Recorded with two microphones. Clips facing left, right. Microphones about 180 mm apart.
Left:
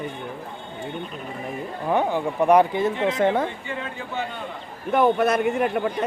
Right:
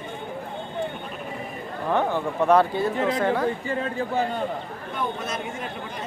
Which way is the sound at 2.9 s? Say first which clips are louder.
Left 2 dB; 40° right (ahead or behind).